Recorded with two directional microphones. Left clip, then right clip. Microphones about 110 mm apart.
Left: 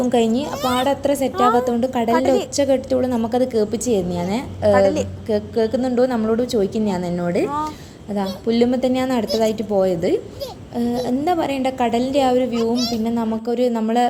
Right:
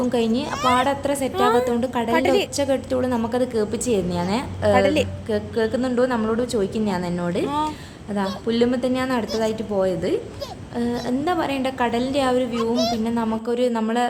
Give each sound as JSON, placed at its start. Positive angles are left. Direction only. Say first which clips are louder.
{"t": 0.5, "sound": "a woman's voice", "louder": "right 2 dB", "side_deg": -25}
{"t": 0.9, "sound": "a woman's voice", "louder": "left 3 dB", "side_deg": 25}
{"t": 10.8, "sound": "a woman's voice", "louder": "left 3 dB", "side_deg": 25}
{"t": 12.7, "sound": "a child's voice", "louder": "right 1 dB", "side_deg": 5}
{"t": 13.1, "sound": "a woman's voice", "louder": "left 1 dB", "side_deg": 20}